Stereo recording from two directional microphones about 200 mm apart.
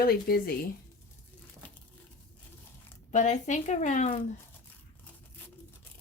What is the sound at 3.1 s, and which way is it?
Speech, 35° left (ahead or behind).